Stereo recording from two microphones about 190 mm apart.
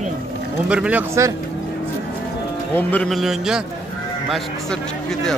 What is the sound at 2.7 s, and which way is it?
Speech, 10° left (ahead or behind).